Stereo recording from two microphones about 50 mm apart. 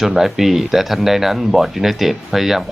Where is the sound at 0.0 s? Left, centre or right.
Centre.